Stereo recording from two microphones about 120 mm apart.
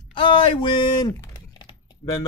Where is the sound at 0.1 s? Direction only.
45° left (ahead or behind).